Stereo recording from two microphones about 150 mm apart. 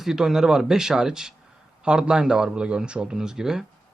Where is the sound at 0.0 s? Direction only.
5° right (ahead or behind).